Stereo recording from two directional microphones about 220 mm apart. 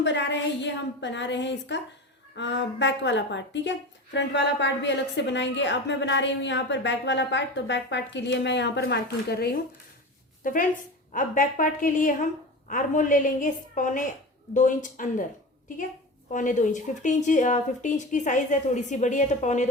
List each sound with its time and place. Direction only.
0.0 s a woman's voice: 55° left (ahead or behind); by 15.3 s 35° left (ahead or behind)
16.3 s speech: 35° left (ahead or behind)